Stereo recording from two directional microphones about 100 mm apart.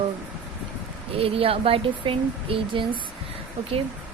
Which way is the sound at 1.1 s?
70° right (ahead or behind).